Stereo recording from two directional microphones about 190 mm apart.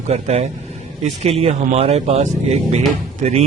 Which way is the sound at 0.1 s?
35° right (ahead or behind).